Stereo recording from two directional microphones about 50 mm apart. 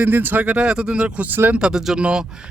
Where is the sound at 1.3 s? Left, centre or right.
Right.